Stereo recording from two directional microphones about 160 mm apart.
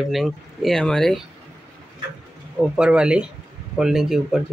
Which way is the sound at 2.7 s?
5° right (ahead or behind).